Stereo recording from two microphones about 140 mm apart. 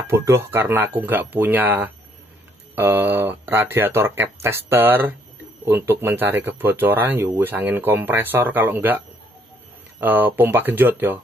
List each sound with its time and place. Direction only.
0.0 s speech: 20° right (ahead or behind)